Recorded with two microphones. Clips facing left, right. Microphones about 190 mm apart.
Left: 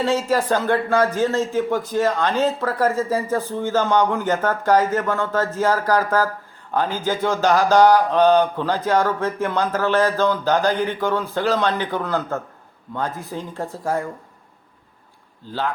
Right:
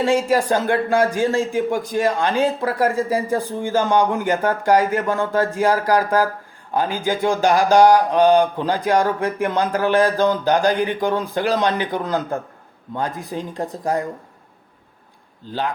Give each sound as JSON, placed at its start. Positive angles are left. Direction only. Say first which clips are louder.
{"t": 0.0, "sound": "speech", "louder": "right 2 dB", "side_deg": -15}
{"t": 15.4, "sound": "speech", "louder": "right 1 dB", "side_deg": -15}